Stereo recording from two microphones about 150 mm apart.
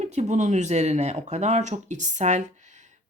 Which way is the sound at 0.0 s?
50° right (ahead or behind).